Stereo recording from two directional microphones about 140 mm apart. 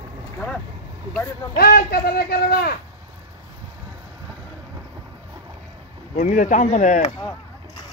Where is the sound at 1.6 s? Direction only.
90° left.